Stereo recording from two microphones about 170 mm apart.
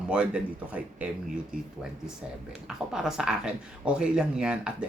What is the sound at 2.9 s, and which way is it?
Speech, 5° right (ahead or behind).